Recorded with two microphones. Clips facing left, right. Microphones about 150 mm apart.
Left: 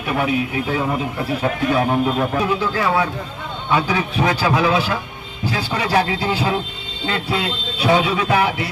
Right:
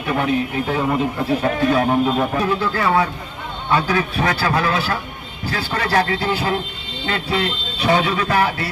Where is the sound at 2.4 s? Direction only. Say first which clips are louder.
Even; 10° left (ahead or behind).